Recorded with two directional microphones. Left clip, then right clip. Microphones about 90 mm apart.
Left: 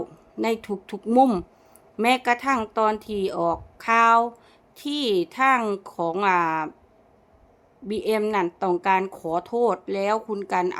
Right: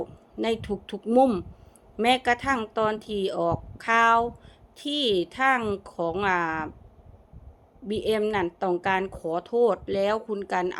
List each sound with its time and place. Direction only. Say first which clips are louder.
0.0 s a woman's voice: left 2 dB; 40° left (ahead or behind)
1.0 s speech: left 2 dB; 50° left (ahead or behind)
2.0 s a woman's voice: left 1 dB; 35° left (ahead or behind)
7.9 s a woman's voice: left 2 dB; 40° left (ahead or behind)